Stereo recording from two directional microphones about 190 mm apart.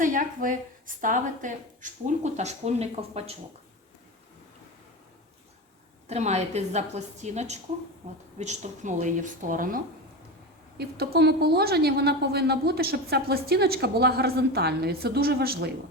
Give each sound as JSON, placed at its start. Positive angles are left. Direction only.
{"t": 0.0, "sound": "a woman's voice", "side_deg": -45}
{"t": 6.1, "sound": "a woman's voice", "side_deg": -35}
{"t": 10.8, "sound": "a woman's voice", "side_deg": -55}